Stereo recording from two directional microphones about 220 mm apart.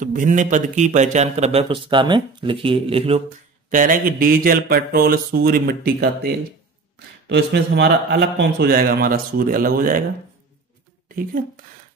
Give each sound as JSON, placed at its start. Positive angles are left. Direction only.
{"t": 0.0, "sound": "a man's voice", "side_deg": -35}
{"t": 3.7, "sound": "a man's voice", "side_deg": -40}
{"t": 7.2, "sound": "a man's voice", "side_deg": -50}